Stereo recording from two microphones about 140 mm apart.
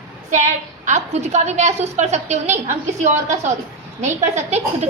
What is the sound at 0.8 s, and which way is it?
A woman's voice, 55° right (ahead or behind).